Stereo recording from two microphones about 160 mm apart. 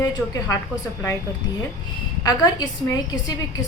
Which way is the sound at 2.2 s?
25° left (ahead or behind).